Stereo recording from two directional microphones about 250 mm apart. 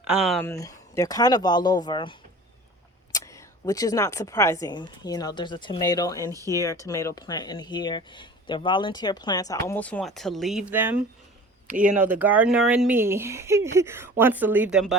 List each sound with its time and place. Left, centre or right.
0.0 s speech: centre
0.5 s speech: centre
6.3 s speech: centre
6.6 s speech: centre